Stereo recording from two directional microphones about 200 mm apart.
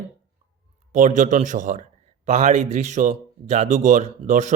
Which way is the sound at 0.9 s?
40° right (ahead or behind).